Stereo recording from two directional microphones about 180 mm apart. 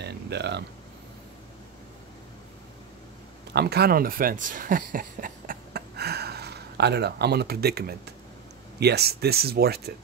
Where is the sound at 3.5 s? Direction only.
65° right (ahead or behind).